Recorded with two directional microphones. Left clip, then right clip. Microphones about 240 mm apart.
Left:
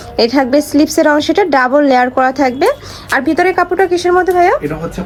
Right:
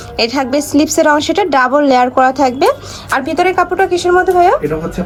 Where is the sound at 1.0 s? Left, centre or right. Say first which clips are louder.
Even; centre.